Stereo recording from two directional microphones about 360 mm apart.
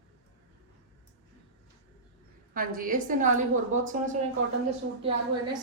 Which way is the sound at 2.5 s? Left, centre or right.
Right.